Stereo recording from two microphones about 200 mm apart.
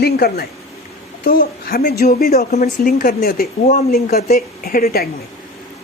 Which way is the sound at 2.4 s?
35° left (ahead or behind).